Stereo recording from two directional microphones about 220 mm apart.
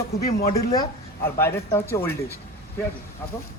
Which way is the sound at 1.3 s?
10° left (ahead or behind).